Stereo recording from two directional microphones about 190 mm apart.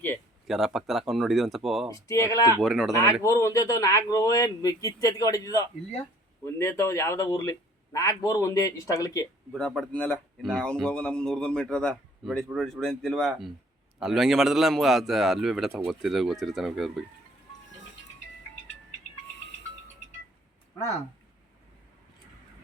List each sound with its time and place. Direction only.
0.4 s speech: centre (ahead or behind)
1.9 s speech: 15° left (ahead or behind)
2.6 s speech: centre (ahead or behind)
2.9 s speech: 15° left (ahead or behind)
9.5 s speech: 5° left (ahead or behind)